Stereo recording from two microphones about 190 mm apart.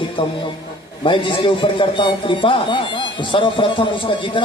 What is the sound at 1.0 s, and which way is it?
A man's voice, 25° left (ahead or behind).